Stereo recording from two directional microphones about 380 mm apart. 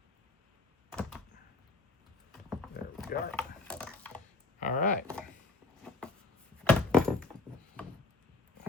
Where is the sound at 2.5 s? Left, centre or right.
Centre.